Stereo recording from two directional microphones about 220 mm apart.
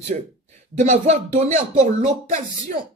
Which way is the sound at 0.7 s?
35° right (ahead or behind).